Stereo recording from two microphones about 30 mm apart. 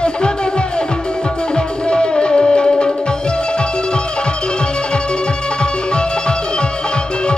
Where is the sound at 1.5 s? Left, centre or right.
Left.